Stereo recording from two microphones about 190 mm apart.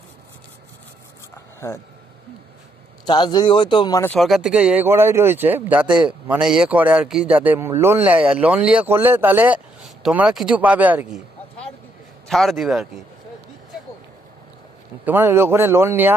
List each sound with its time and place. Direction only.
1.6 s speech: 15° left (ahead or behind)
3.1 s speech: 25° left (ahead or behind)
4.1 s speech: centre (ahead or behind)
12.3 s a man's voice: centre (ahead or behind)
15.0 s speech: 10° right (ahead or behind)